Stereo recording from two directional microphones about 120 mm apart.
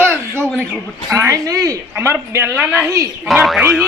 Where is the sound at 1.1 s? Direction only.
25° right (ahead or behind).